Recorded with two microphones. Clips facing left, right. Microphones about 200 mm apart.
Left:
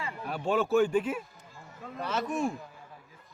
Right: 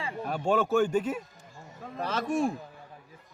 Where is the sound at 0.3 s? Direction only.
45° right (ahead or behind).